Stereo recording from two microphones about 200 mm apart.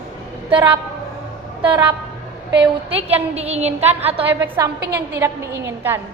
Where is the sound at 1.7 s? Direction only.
10° right (ahead or behind).